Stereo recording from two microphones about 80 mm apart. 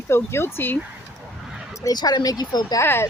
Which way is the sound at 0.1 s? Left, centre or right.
Left.